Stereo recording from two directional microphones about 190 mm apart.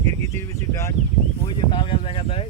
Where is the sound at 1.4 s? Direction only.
25° left (ahead or behind).